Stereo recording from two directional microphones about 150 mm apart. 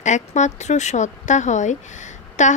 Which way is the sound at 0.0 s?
50° left (ahead or behind).